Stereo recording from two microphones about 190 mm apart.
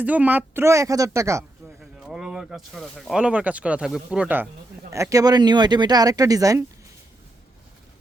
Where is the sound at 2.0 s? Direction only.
5° right (ahead or behind).